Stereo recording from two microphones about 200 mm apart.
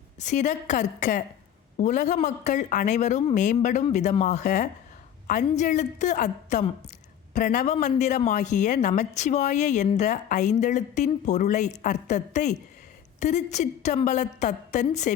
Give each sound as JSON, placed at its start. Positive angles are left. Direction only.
{"t": 0.2, "sound": "speech", "side_deg": 35}